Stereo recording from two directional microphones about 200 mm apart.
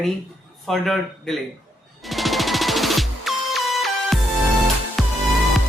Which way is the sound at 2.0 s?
Centre (ahead or behind).